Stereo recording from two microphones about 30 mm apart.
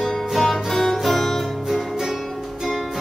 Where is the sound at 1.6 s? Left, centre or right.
Centre.